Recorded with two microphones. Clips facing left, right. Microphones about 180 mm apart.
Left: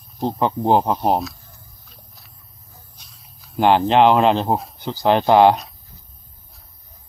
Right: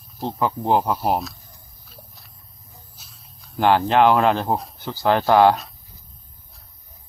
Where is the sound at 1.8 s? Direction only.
Centre (ahead or behind).